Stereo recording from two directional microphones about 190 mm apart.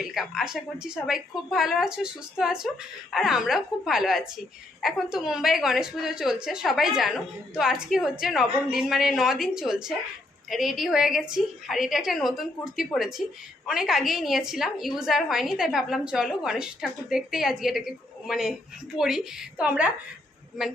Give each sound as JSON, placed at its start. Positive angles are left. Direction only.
{"t": 0.0, "sound": "a woman's voice", "side_deg": 0}